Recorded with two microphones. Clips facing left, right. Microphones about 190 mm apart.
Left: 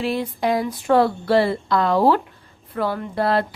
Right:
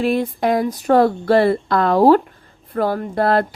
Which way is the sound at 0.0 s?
50° right (ahead or behind).